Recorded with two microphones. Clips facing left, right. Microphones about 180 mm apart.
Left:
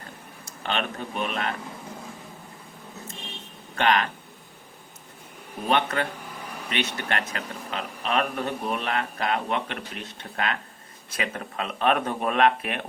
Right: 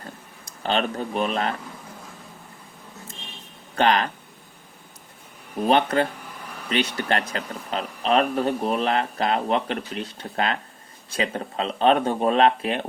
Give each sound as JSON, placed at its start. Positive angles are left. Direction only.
{"t": 0.6, "sound": "a man's voice", "side_deg": -35}
{"t": 3.8, "sound": "speech", "side_deg": -35}
{"t": 5.6, "sound": "a man's voice", "side_deg": -35}